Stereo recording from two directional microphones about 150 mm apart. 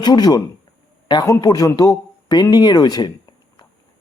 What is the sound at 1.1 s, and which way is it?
A man's voice, 25° left (ahead or behind).